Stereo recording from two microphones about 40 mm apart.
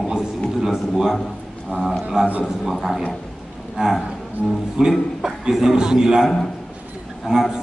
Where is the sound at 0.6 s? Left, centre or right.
Centre.